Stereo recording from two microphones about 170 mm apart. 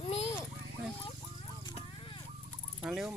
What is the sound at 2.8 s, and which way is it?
Fowl, 5° right (ahead or behind).